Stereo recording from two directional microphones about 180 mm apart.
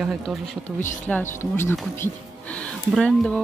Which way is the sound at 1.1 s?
10° left (ahead or behind).